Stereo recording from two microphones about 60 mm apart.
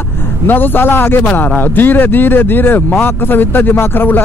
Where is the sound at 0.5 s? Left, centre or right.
Left.